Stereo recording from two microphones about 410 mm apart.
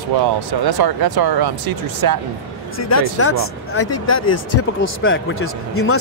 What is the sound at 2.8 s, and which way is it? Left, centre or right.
Speech, left.